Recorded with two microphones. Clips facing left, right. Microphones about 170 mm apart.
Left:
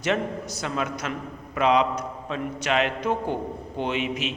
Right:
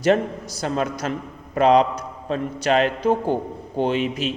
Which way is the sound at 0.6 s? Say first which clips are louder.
Right 6 dB; 35° right (ahead or behind).